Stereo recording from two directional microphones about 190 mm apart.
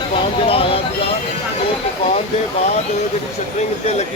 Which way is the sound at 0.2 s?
30° left (ahead or behind).